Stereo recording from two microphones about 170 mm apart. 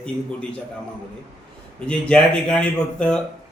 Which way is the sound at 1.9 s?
5° left (ahead or behind).